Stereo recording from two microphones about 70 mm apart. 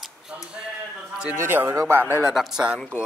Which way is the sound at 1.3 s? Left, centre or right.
Right.